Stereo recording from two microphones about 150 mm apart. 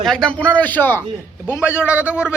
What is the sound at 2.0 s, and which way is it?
Speech, 5° right (ahead or behind).